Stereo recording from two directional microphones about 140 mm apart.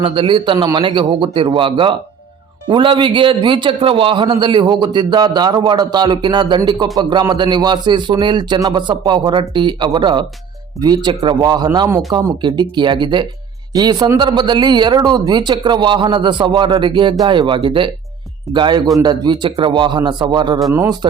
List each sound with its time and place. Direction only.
0.0 s a man's voice: 40° right (ahead or behind)